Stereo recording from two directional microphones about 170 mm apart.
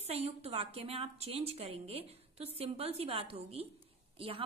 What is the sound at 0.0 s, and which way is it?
Speech, 40° right (ahead or behind).